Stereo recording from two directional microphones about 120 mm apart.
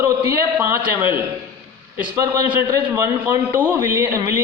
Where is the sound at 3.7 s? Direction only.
25° right (ahead or behind).